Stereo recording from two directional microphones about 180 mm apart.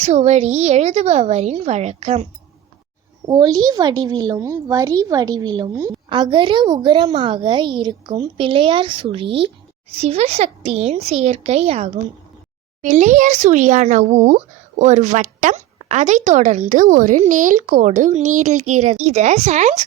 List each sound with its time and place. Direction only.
0.0 s speech: 40° right (ahead or behind)
3.2 s a woman's voice: 20° right (ahead or behind); by 19.8 s 40° right (ahead or behind)